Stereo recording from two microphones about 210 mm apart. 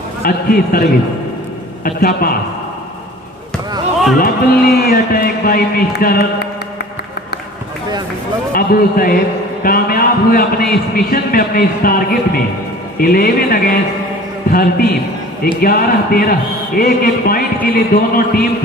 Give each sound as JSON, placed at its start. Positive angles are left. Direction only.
{"t": 0.2, "sound": "a man's voice", "side_deg": 45}
{"t": 4.2, "sound": "a man's voice", "side_deg": 45}
{"t": 8.5, "sound": "a man's voice", "side_deg": 45}